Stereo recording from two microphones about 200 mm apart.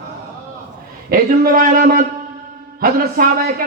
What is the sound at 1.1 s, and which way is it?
A man's voice, 45° right (ahead or behind).